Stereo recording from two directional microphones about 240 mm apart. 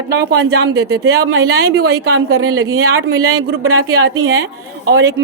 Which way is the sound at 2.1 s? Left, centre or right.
Right.